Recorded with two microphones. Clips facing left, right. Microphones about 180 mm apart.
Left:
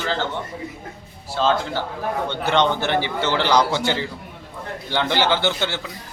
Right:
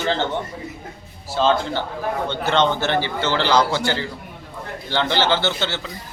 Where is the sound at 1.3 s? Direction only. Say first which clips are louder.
Right 2 dB; centre (ahead or behind).